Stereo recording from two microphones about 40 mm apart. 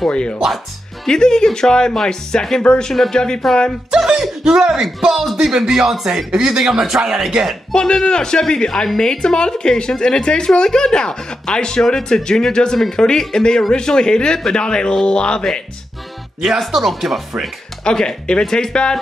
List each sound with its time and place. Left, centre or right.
0.1 s a woman's voice: left; by 3.6 s centre
4.0 s chuckle: centre
5.1 s speech: centre
7.7 s a woman's voice: centre
16.4 s speech: centre
17.8 s a woman's voice: left